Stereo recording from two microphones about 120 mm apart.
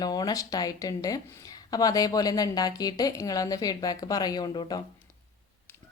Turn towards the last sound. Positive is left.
turn(degrees=35)  # may be behind; listen again after turning